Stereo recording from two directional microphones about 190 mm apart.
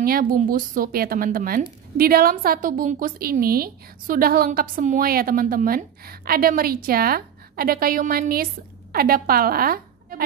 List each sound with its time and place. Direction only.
0.0 s a woman's voice: 50° right (ahead or behind)